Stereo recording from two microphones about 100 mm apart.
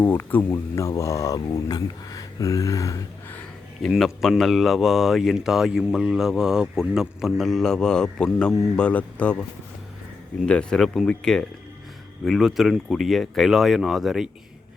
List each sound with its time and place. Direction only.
0.0 s speech: 20° left (ahead or behind)
0.8 s speech: 30° left (ahead or behind)
3.8 s speech: centre (ahead or behind)
10.4 s speech: 10° left (ahead or behind)